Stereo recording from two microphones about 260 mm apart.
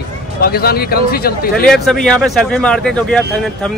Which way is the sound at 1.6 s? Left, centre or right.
Centre.